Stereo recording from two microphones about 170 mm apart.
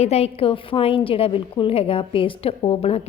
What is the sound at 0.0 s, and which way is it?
A woman's voice, 35° left (ahead or behind).